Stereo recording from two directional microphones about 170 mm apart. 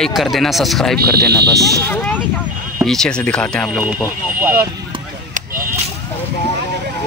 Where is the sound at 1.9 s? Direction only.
10° left (ahead or behind).